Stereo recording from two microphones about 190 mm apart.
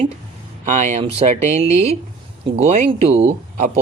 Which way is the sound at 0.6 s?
40° right (ahead or behind).